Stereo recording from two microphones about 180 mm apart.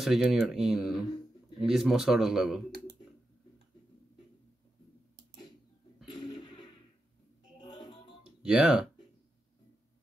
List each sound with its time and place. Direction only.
0.0 s speech: centre (ahead or behind)
6.1 s a sound: 20° left (ahead or behind)
7.6 s music: 25° left (ahead or behind)
8.4 s speech: 5° right (ahead or behind)